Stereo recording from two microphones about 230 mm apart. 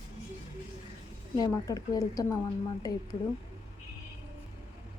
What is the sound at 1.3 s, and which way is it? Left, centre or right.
A woman's voice, centre.